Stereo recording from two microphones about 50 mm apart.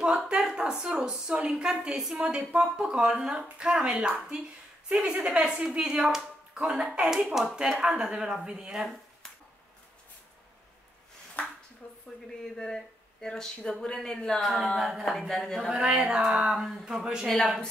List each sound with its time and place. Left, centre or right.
0.4 s a sound: centre
0.8 s speech: centre
11.4 s a sound: left
12.5 s speech: centre
14.4 s speech: centre
15.0 s speech: centre
16.1 s speech: centre
17.3 s speech: centre